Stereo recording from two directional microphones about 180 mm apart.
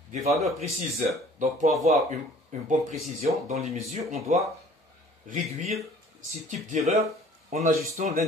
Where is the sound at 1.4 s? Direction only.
40° right (ahead or behind).